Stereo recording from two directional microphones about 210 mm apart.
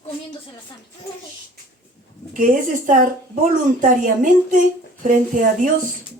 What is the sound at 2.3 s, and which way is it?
Speech, 40° right (ahead or behind).